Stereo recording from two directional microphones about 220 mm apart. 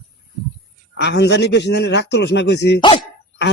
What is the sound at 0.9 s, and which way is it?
Speech, 50° left (ahead or behind).